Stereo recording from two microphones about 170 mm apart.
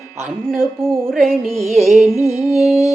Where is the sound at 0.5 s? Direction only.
15° right (ahead or behind).